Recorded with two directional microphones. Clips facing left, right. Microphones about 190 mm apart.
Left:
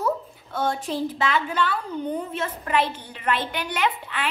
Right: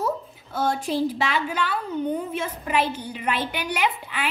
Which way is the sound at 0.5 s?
10° right (ahead or behind).